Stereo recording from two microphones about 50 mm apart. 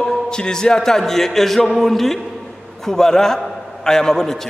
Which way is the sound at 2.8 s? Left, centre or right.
Centre.